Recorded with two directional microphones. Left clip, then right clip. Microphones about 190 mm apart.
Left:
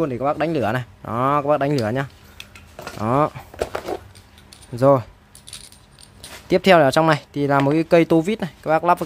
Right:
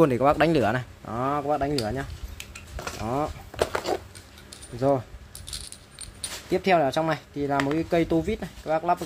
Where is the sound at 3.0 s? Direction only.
50° left (ahead or behind).